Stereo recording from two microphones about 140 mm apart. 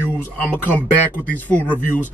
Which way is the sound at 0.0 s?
15° left (ahead or behind).